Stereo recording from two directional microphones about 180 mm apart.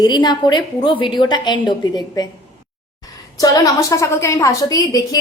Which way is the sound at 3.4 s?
20° left (ahead or behind).